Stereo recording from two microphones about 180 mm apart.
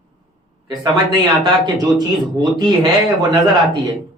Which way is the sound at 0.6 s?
20° right (ahead or behind).